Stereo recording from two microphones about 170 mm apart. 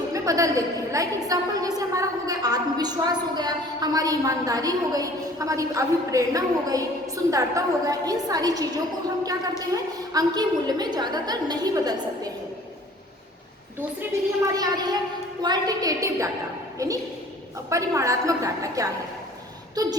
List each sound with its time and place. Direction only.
0.1 s a woman's voice: 20° right (ahead or behind)
14.4 s a woman's voice: 20° right (ahead or behind)